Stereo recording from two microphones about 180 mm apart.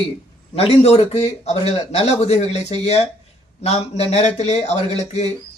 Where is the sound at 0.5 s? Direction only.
35° left (ahead or behind).